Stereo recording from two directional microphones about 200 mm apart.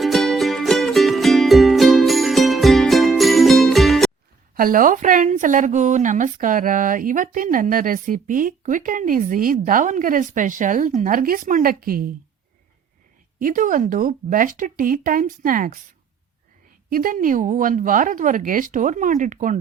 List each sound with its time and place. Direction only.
0.0 s music: centre (ahead or behind)
4.5 s a woman's voice: 45° right (ahead or behind)
13.4 s speech: 40° right (ahead or behind)
16.9 s a woman's voice: 45° right (ahead or behind)